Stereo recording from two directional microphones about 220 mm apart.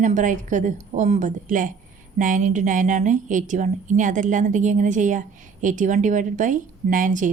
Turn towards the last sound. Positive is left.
turn(degrees=-35)  # may be behind; listen again after turning